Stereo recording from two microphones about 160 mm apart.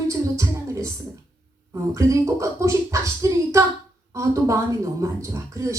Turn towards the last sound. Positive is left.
turn(degrees=-20)  # may be behind; listen again after turning